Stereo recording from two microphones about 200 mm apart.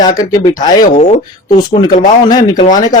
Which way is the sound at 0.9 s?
35° left (ahead or behind).